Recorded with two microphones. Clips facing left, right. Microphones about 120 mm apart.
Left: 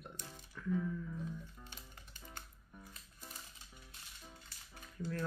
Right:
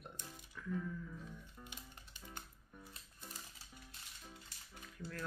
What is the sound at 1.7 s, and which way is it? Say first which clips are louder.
Music: right 1 dB; 15° right (ahead or behind).